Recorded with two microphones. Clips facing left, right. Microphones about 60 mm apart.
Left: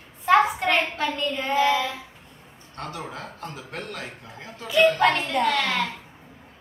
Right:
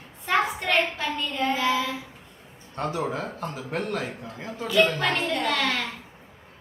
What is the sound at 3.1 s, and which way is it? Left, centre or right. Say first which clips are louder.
Speech: right 5 dB; right.